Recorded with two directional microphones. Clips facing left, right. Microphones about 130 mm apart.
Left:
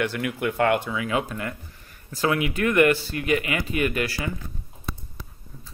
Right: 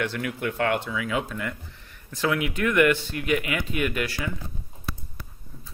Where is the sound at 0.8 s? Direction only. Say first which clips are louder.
Left 2 dB; 45° left (ahead or behind).